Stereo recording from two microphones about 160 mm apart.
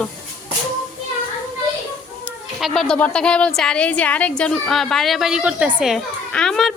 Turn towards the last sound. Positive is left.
turn(degrees=0)  # may be behind; listen again after turning